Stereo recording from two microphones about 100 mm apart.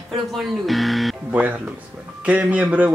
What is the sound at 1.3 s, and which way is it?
Speech, 15° right (ahead or behind).